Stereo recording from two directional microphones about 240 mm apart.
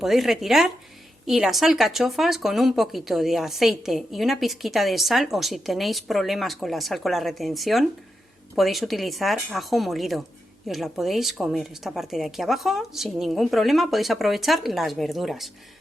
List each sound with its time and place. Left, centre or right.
0.0 s speech: centre